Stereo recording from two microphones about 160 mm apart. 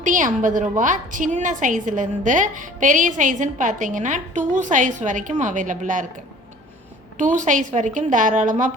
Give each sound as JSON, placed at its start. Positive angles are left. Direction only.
{"t": 0.0, "sound": "a woman's voice", "side_deg": -55}
{"t": 7.2, "sound": "a woman's voice", "side_deg": -50}